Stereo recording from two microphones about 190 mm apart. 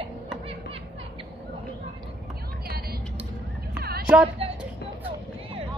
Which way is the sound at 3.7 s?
55° right (ahead or behind).